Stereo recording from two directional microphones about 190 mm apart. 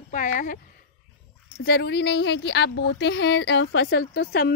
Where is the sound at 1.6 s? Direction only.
60° left (ahead or behind).